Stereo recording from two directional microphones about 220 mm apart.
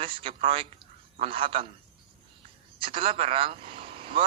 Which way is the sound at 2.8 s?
25° right (ahead or behind).